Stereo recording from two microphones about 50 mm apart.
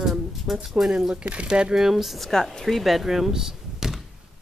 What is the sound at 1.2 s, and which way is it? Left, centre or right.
Speech, right.